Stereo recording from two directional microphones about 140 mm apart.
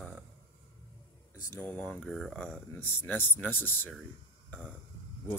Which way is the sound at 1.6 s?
10° left (ahead or behind).